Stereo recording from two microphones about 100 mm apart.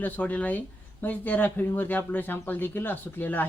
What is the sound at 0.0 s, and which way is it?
Speech, 15° left (ahead or behind).